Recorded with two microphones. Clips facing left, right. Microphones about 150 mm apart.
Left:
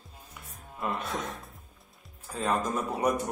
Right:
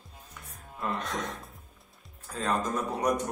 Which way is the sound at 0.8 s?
5° left (ahead or behind).